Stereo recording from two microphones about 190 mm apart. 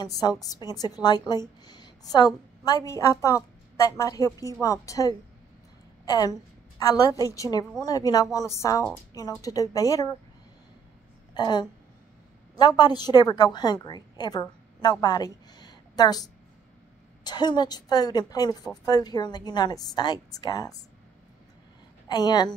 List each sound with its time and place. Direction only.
0.2 s a woman's voice: 20° left (ahead or behind)
11.3 s a woman's voice: 20° left (ahead or behind)
22.0 s a woman's voice: 20° left (ahead or behind)